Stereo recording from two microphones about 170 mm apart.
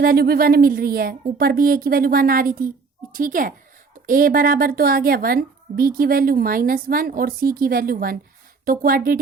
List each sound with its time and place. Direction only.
0.0 s a woman's voice: 65° right (ahead or behind)